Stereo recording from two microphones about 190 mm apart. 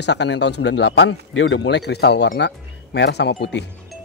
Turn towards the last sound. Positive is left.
turn(degrees=65)  # may be behind; listen again after turning